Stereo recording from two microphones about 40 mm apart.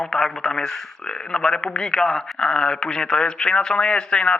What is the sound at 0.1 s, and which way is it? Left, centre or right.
Speech, centre.